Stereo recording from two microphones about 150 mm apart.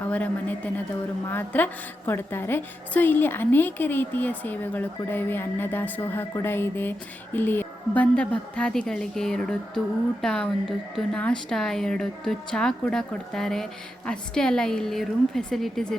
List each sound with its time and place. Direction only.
0.0 s a woman's voice: 10° left (ahead or behind)